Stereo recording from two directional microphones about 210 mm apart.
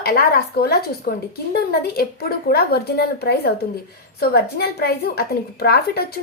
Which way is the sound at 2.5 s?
50° left (ahead or behind).